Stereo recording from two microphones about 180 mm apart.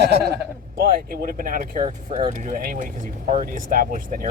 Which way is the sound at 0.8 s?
55° right (ahead or behind).